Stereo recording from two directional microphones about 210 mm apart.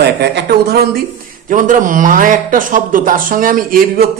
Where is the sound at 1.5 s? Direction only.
40° right (ahead or behind).